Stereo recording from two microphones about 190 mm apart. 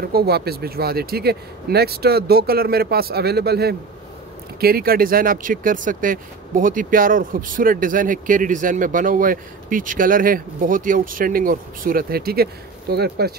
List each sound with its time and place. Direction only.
0.0 s speech: 55° right (ahead or behind)